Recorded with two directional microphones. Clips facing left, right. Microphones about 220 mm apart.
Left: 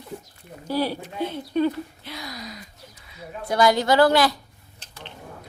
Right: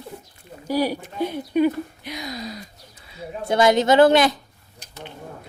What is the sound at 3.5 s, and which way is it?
Speech, 25° right (ahead or behind).